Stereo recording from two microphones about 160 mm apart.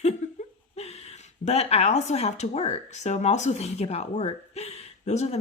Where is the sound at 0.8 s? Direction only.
40° left (ahead or behind).